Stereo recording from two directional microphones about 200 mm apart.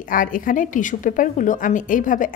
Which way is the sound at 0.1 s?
40° left (ahead or behind).